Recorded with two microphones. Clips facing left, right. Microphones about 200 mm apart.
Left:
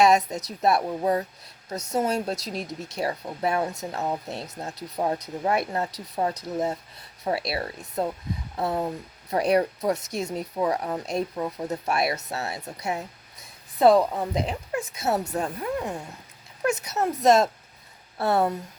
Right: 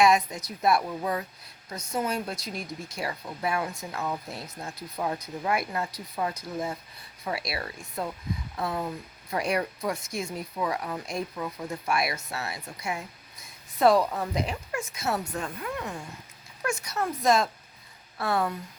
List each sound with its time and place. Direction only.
0.0 s speech: 40° left (ahead or behind)
11.7 s speech: 40° left (ahead or behind)
12.4 s a sound: 40° left (ahead or behind)
13.9 s speech: 20° left (ahead or behind)
14.3 s speech: 35° left (ahead or behind)
17.1 s speech: 40° left (ahead or behind)
18.2 s speech: 25° left (ahead or behind)